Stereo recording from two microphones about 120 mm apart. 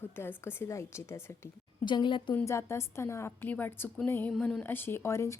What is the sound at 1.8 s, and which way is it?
Speech, 40° left (ahead or behind).